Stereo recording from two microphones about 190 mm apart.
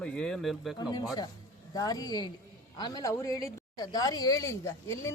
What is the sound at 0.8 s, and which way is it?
A woman's voice, 20° left (ahead or behind).